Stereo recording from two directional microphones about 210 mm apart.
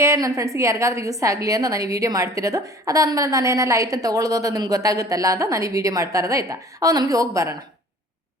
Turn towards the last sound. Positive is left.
turn(degrees=-15)  # may be behind; listen again after turning